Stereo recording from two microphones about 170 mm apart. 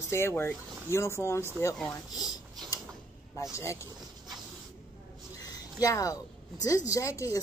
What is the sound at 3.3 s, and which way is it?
Speech, 15° left (ahead or behind).